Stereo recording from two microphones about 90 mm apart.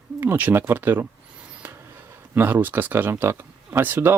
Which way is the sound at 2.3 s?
20° right (ahead or behind).